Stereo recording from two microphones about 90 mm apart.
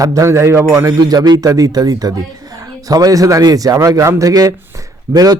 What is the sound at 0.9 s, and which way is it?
A man's voice, 45° right (ahead or behind).